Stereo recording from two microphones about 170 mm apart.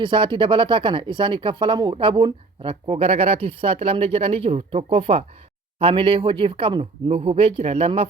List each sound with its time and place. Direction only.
0.0 s speech: 30° right (ahead or behind)